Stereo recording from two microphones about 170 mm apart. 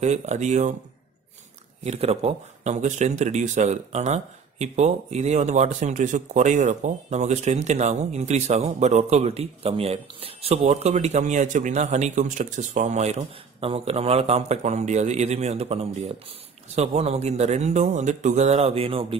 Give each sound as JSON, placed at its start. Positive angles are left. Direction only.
{"t": 0.0, "sound": "speech", "side_deg": -40}
{"t": 1.9, "sound": "speech", "side_deg": -35}